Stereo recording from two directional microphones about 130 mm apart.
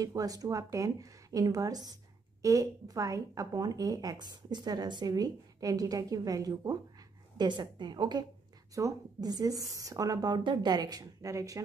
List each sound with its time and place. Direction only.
0.0 s a woman's voice: 25° right (ahead or behind)